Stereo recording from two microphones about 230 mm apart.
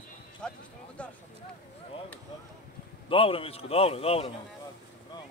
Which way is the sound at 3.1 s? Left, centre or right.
Left.